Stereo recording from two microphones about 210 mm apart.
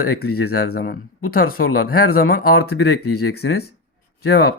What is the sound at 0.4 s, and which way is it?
Speech, 45° left (ahead or behind).